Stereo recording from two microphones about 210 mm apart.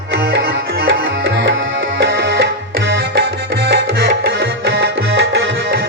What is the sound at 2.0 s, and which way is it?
Music, 60° right (ahead or behind).